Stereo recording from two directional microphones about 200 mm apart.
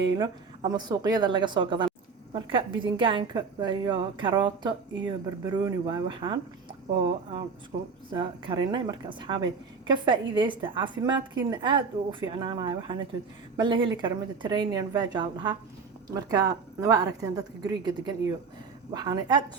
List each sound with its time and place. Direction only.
0.2 s a woman's voice: 20° right (ahead or behind)